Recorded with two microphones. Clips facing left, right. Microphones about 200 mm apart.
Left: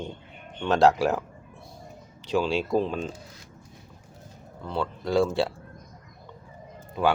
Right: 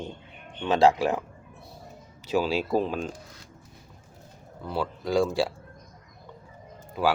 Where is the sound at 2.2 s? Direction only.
5° right (ahead or behind).